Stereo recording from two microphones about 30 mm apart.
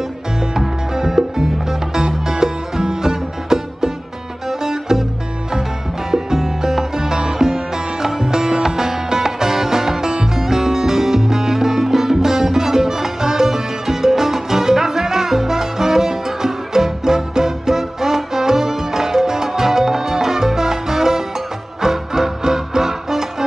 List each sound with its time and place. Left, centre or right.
0.6 s music: centre
6.1 s music: centre